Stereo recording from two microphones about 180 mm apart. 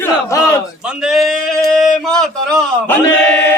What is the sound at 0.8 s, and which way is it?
Speech, 5° right (ahead or behind).